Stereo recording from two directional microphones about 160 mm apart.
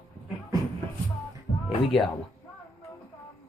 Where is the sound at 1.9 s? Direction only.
Centre (ahead or behind).